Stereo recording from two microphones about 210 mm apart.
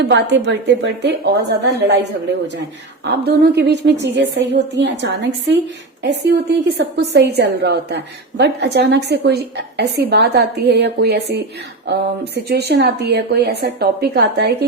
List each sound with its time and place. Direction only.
0.0 s a woman's voice: 60° right (ahead or behind)